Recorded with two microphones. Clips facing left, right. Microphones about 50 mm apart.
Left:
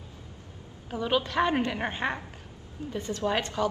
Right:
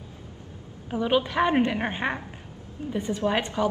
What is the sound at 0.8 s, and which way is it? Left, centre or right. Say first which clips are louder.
A woman's voice: right 4 dB; centre.